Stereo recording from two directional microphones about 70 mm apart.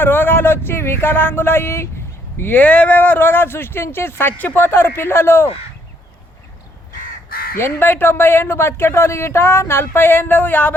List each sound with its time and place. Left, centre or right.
0.0 s a woman's voice: left
2.4 s a woman's voice: left
7.6 s a woman's voice: left